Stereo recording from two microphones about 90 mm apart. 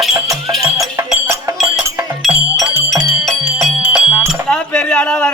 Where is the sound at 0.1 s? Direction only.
40° right (ahead or behind).